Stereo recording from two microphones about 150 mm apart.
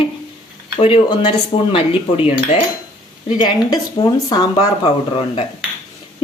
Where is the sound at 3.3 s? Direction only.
30° left (ahead or behind).